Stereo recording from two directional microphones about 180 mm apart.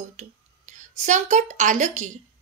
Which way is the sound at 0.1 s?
40° right (ahead or behind).